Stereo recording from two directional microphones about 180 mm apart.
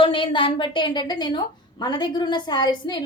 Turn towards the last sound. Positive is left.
turn(degrees=25)  # may be behind; listen again after turning